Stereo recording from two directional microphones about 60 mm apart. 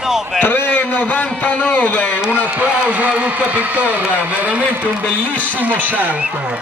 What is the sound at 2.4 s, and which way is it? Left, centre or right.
A man's voice, right.